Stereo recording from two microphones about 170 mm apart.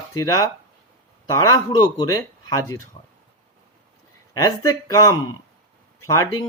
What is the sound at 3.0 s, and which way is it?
Speech, 35° left (ahead or behind).